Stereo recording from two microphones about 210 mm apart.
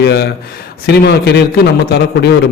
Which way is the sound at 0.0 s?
50° left (ahead or behind).